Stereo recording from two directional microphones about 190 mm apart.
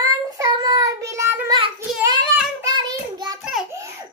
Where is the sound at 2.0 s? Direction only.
25° right (ahead or behind).